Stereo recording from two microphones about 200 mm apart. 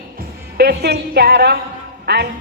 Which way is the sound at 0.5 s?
50° right (ahead or behind).